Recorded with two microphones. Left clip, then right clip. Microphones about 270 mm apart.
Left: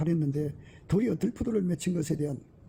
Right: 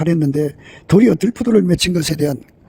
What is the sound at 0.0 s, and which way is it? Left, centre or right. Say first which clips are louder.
Speech: right 14 dB; right.